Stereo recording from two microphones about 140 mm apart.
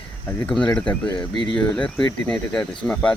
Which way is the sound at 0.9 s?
35° left (ahead or behind).